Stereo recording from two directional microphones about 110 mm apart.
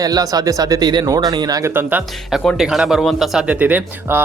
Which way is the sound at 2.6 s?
5° right (ahead or behind).